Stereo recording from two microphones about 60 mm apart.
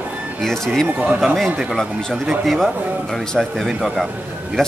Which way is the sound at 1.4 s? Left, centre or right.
Centre.